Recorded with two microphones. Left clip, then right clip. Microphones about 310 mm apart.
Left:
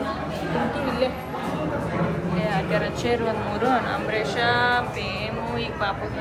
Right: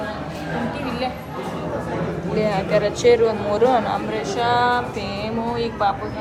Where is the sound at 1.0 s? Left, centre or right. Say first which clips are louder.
Left 2 dB; centre.